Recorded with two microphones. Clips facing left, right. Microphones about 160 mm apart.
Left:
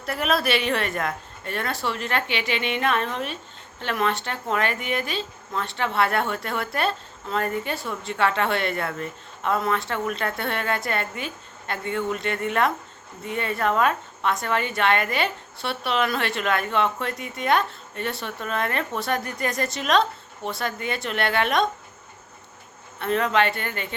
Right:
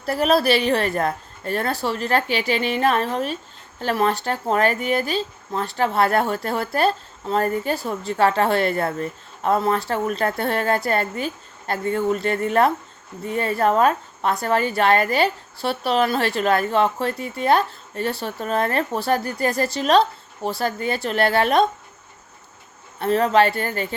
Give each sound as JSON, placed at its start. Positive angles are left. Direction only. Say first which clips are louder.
{"t": 0.0, "sound": "a woman's voice", "louder": "right 6 dB", "side_deg": -35}
{"t": 23.0, "sound": "a woman's voice", "louder": "right 5 dB", "side_deg": -35}